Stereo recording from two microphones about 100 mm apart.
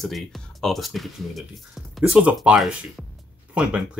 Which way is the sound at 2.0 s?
10° right (ahead or behind).